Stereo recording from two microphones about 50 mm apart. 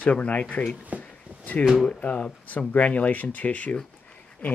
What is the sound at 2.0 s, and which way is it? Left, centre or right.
Speech, left.